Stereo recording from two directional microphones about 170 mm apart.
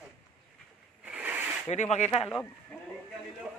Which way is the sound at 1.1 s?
10° right (ahead or behind).